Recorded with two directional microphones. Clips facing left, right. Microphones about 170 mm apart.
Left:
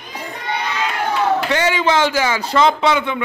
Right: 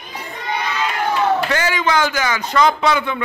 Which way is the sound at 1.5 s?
25° left (ahead or behind).